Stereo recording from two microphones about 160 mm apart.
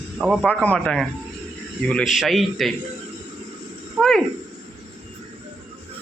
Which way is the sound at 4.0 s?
5° left (ahead or behind).